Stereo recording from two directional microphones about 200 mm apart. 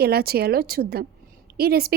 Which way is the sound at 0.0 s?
50° right (ahead or behind).